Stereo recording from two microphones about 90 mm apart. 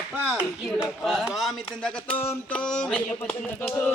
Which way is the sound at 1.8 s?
15° left (ahead or behind).